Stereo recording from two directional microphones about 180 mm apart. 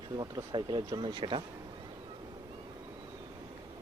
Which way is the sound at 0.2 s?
25° right (ahead or behind).